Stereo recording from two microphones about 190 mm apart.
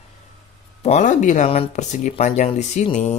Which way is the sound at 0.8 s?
40° left (ahead or behind).